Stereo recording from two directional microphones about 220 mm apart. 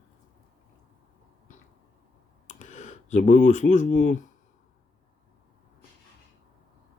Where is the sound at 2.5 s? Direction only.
35° left (ahead or behind).